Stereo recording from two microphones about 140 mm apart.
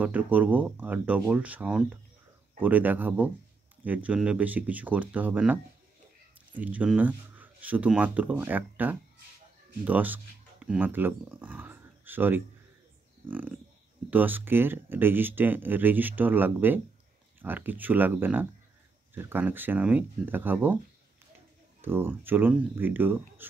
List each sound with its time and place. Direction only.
0.0 s speech: 10° right (ahead or behind)
14.1 s speech: 15° right (ahead or behind)
21.8 s speech: 15° right (ahead or behind)